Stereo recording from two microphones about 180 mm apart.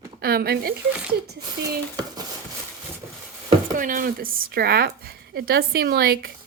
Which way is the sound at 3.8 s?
50° right (ahead or behind).